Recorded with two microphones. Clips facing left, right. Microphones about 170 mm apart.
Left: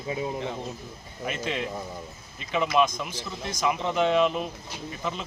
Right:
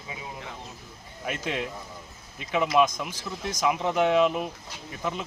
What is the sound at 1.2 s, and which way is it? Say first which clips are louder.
Speech: even; 10° right (ahead or behind).